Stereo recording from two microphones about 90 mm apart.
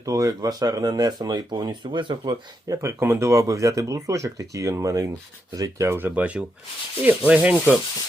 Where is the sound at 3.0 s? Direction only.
30° right (ahead or behind).